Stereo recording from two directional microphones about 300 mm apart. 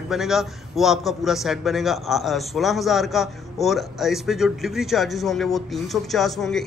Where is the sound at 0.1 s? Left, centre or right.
Centre.